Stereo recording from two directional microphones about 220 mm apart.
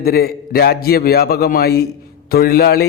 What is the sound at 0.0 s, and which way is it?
A man's voice, 45° left (ahead or behind).